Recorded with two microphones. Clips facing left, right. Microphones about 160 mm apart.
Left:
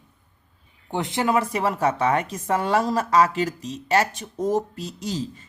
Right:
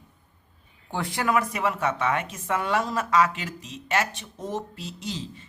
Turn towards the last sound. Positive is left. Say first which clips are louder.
# left 5 dB
turn(degrees=40)  # may be behind; listen again after turning